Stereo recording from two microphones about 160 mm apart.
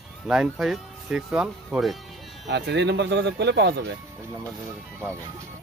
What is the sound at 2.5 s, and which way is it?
Speech, 90° right.